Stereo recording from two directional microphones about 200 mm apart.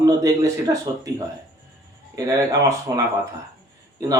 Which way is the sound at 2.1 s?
15° right (ahead or behind).